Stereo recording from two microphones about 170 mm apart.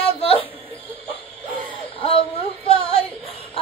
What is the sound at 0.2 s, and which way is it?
Music, 35° left (ahead or behind).